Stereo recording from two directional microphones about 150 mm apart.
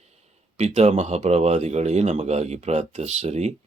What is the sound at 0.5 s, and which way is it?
Speech, 45° right (ahead or behind).